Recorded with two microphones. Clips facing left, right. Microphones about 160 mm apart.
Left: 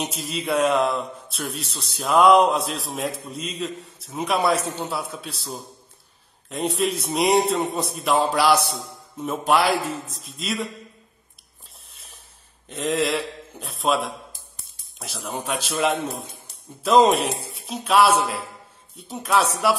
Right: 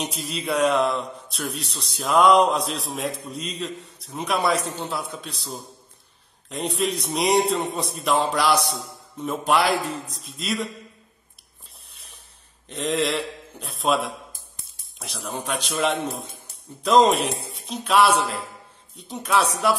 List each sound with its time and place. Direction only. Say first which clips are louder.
0.0 s a man's voice: left 1 dB; centre (ahead or behind)
11.9 s a sound: left 1 dB; centre (ahead or behind)
12.6 s a man's voice: left 1 dB; centre (ahead or behind)